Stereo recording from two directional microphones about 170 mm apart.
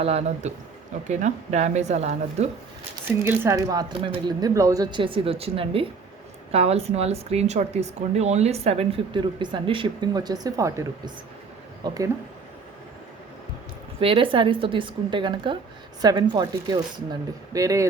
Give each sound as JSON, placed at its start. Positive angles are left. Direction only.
{"t": 0.0, "sound": "speech", "side_deg": -40}
{"t": 3.2, "sound": "speech", "side_deg": -15}
{"t": 14.0, "sound": "speech", "side_deg": -30}